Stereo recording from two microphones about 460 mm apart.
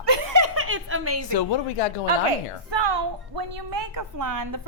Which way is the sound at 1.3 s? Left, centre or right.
Left.